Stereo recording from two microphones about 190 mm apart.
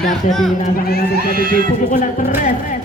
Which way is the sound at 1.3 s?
50° right (ahead or behind).